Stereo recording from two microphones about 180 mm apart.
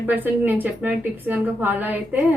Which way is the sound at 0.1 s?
10° right (ahead or behind).